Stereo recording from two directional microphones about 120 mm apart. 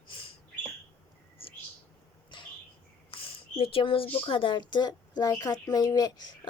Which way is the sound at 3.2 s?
50° left (ahead or behind).